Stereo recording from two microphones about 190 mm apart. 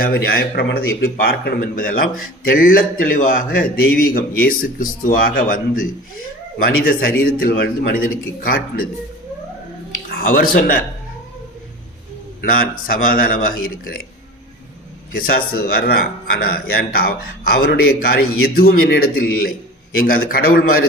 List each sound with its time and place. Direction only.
0.0 s a man's voice: 55° left (ahead or behind)
10.1 s speech: 50° left (ahead or behind)
12.8 s a man's voice: 50° left (ahead or behind)
15.1 s a man's voice: 50° left (ahead or behind)